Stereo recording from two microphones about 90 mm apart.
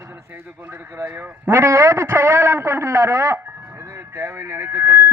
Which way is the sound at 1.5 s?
30° right (ahead or behind).